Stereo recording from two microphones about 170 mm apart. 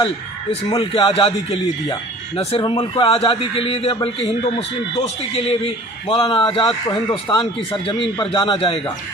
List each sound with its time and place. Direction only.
0.7 s a man's voice: 30° left (ahead or behind)